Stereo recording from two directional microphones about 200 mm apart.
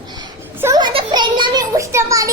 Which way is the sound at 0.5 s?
15° right (ahead or behind).